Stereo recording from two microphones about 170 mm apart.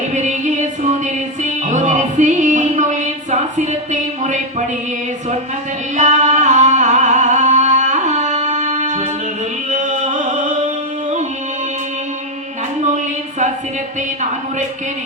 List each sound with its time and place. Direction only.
0.1 s music: 45° right (ahead or behind)
6.0 s music: 45° right (ahead or behind)